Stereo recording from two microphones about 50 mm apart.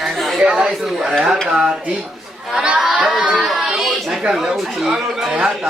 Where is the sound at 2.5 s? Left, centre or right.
Centre.